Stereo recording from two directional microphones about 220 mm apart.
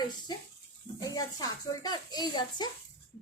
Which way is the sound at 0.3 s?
20° left (ahead or behind).